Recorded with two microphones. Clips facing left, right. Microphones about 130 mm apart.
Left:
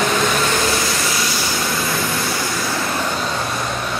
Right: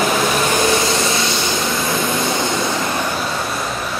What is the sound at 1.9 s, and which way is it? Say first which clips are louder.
Vehicle: right 3 dB; 20° right (ahead or behind).